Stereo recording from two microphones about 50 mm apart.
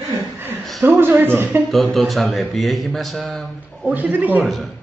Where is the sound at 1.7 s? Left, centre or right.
Centre.